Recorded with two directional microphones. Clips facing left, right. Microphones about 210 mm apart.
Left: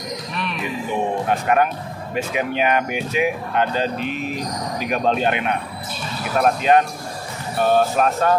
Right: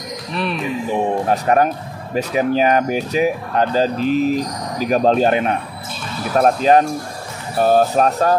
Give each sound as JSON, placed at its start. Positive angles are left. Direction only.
{"t": 1.3, "sound": "speech", "side_deg": -40}